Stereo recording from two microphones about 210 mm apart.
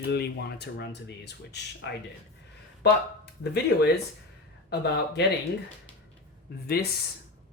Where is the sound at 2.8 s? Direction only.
50° left (ahead or behind).